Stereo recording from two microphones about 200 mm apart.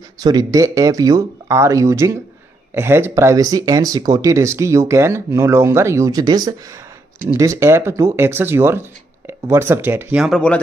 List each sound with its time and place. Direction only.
0.2 s speech: 20° right (ahead or behind); by 10.6 s 5° left (ahead or behind)